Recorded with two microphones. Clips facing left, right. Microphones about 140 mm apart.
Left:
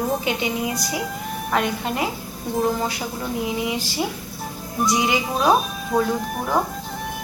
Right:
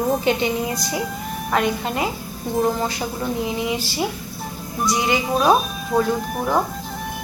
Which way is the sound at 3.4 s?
15° left (ahead or behind).